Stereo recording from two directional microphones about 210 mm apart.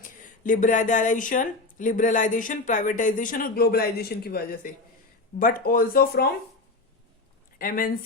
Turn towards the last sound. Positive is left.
turn(degrees=40)  # may be behind; listen again after turning